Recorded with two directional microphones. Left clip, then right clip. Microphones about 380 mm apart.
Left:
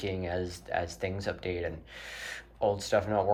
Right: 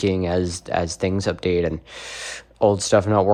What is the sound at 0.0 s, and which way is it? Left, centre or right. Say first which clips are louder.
Speech: right 12 dB; centre.